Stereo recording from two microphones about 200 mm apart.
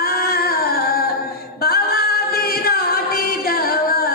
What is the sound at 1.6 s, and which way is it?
Singing, 50° left (ahead or behind).